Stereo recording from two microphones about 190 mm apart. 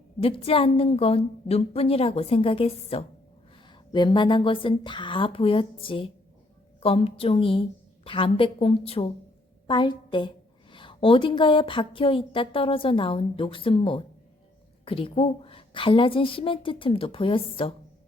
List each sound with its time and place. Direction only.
0.2 s a woman's voice: 30° left (ahead or behind)